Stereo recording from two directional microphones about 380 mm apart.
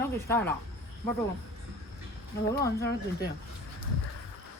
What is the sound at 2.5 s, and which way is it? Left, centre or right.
Speech, centre.